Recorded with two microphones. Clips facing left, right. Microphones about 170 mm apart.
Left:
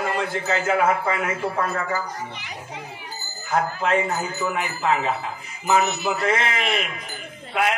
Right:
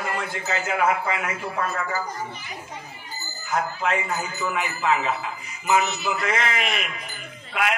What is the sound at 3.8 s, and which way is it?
A man's voice, 45° left (ahead or behind).